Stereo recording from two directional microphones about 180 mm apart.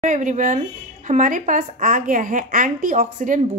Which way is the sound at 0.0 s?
45° right (ahead or behind).